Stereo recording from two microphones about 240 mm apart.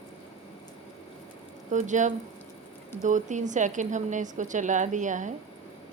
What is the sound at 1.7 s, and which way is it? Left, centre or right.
A woman's voice, right.